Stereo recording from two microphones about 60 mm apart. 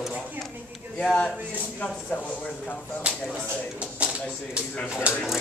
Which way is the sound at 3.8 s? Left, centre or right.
Centre.